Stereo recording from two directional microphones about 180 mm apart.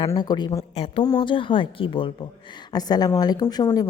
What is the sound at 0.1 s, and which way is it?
A woman's voice, 25° left (ahead or behind).